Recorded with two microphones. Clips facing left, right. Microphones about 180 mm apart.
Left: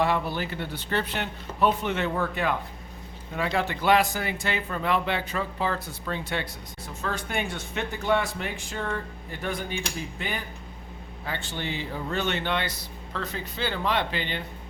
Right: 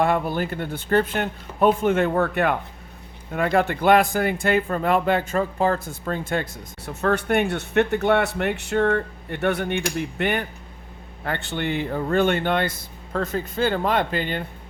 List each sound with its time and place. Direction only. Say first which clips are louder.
0.0 s a man's voice: right 4 dB; 50° right (ahead or behind)
6.8 s a man's voice: right 10 dB; 65° right (ahead or behind); by 14.4 s 45° right (ahead or behind)